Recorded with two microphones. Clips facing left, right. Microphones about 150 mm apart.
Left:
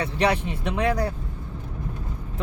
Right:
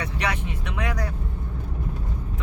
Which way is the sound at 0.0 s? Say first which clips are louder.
Left 6 dB; 30° left (ahead or behind).